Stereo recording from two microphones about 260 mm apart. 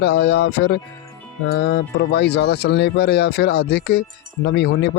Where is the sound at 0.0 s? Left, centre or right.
Left.